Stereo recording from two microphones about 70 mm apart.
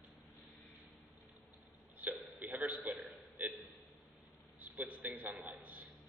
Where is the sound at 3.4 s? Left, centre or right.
Right.